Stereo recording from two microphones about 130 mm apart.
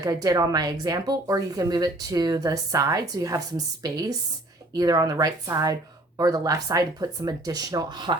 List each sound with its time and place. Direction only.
0.0 s speech: 30° right (ahead or behind)